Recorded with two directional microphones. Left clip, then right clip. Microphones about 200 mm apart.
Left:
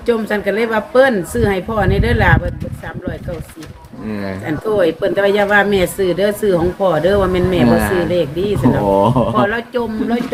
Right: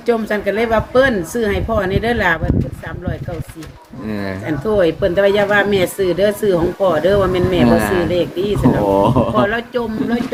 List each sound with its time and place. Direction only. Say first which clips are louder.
0.0 s speech: even; centre (ahead or behind)
4.1 s speech: even; 15° right (ahead or behind)
4.4 s speech: even; 5° left (ahead or behind)
7.6 s speech: even; 10° right (ahead or behind)
8.0 s speech: left 1 dB; centre (ahead or behind)
8.9 s speech: left 2 dB; 15° right (ahead or behind); by 10.2 s 5° left (ahead or behind)